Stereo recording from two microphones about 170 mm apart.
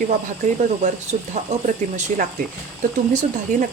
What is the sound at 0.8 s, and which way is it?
Speech, 45° right (ahead or behind).